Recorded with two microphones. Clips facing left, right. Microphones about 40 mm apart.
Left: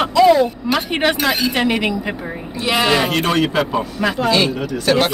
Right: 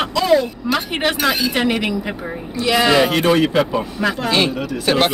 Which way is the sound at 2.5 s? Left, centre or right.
Left.